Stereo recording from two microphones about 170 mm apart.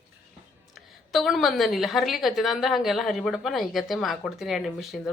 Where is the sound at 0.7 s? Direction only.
Centre (ahead or behind).